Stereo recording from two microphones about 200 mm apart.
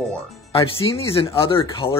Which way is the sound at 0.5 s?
30° left (ahead or behind).